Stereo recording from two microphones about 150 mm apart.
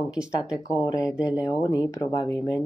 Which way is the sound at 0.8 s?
20° left (ahead or behind).